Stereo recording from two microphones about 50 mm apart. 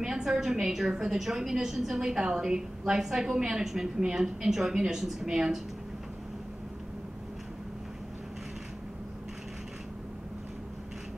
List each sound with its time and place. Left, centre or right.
0.0 s a woman's voice: centre